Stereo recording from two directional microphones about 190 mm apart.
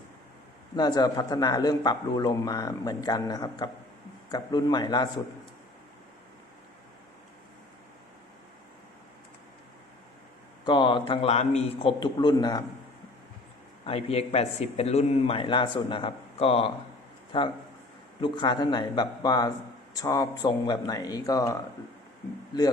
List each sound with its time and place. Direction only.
0.8 s speech: 20° left (ahead or behind)
10.7 s speech: 25° left (ahead or behind)
13.8 s a man's voice: 30° left (ahead or behind)